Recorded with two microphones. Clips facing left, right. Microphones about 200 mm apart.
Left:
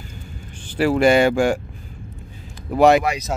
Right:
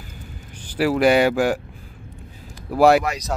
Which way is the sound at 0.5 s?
10° right (ahead or behind).